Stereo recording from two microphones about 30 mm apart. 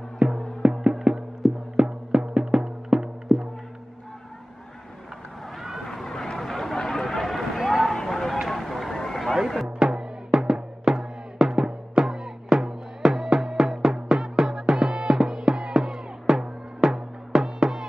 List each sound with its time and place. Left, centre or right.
0.2 s music: right; by 1.2 s centre
1.4 s music: centre
1.8 s music: right
3.3 s music: centre
5.6 s vehicle: centre
5.9 s run: centre
6.3 s a sound: centre
7.9 s a sound: centre
8.9 s a sound: centre
9.8 s drum: right
10.5 s music: centre